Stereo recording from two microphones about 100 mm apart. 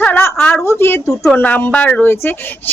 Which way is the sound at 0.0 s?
20° left (ahead or behind).